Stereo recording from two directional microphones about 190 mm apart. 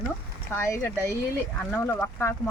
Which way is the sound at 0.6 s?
15° left (ahead or behind).